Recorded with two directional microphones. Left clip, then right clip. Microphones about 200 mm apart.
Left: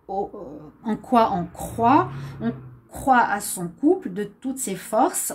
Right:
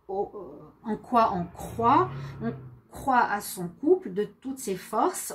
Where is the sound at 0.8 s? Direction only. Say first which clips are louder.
Left 4 dB; 40° left (ahead or behind).